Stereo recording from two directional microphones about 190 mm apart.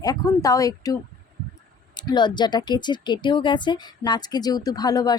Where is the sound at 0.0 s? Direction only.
20° left (ahead or behind).